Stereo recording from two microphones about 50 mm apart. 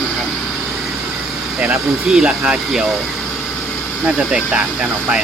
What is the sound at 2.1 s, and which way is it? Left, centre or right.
Speech, centre.